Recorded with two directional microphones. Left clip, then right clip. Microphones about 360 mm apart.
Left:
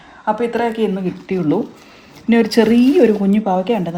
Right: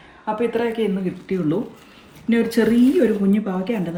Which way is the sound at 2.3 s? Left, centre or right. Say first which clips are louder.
Left 5 dB; centre.